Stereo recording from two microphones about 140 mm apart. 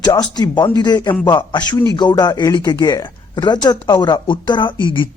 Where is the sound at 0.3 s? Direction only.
30° left (ahead or behind).